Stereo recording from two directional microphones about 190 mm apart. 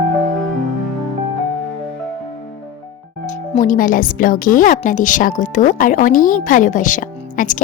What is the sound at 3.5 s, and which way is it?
A woman's voice, 40° left (ahead or behind).